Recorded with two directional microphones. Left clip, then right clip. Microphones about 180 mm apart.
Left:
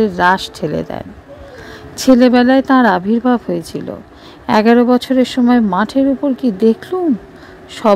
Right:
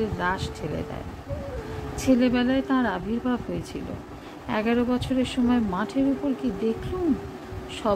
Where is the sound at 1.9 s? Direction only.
50° left (ahead or behind).